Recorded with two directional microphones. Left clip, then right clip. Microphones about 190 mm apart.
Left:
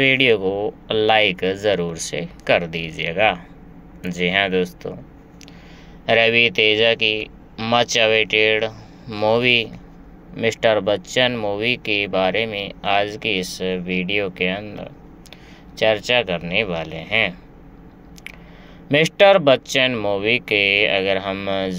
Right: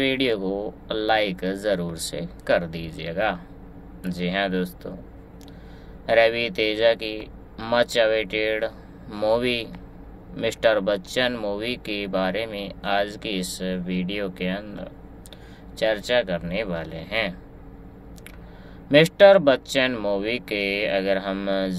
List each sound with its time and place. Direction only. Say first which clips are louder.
0.0 s speech: left 7 dB; 20° left (ahead or behind)
6.0 s speech: left 4 dB; 20° left (ahead or behind)
18.9 s speech: even; 15° left (ahead or behind)